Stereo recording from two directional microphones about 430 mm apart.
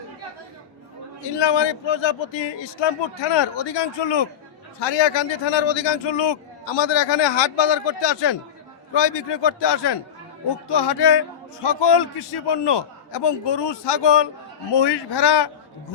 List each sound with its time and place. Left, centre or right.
1.4 s a man's voice: left
3.3 s a man's voice: left